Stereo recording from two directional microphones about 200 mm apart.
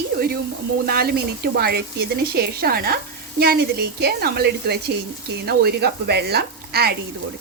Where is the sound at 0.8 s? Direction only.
50° right (ahead or behind).